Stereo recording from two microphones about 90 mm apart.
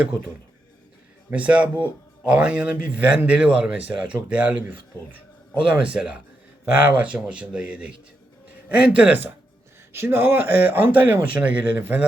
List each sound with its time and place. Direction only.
1.3 s a man's voice: 15° right (ahead or behind)